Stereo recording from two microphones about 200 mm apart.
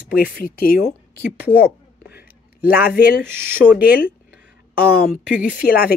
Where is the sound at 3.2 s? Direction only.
10° right (ahead or behind).